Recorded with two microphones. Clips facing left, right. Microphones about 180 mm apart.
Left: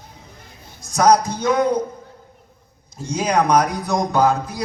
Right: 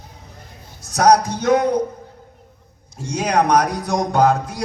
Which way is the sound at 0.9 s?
70° right (ahead or behind).